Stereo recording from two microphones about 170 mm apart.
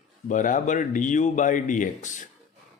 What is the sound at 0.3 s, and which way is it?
Speech, 50° left (ahead or behind).